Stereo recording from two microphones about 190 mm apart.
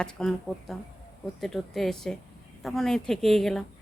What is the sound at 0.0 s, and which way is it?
Speech, 5° left (ahead or behind).